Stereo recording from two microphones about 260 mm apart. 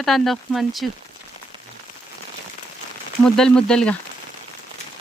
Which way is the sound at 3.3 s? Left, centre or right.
Centre.